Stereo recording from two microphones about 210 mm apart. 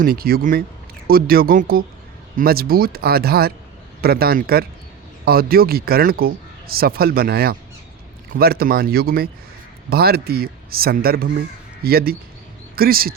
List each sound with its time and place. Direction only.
0.0 s a man's voice: 45° right (ahead or behind)